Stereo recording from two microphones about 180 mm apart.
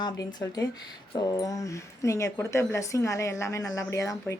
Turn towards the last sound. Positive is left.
turn(degrees=15)  # may be behind; listen again after turning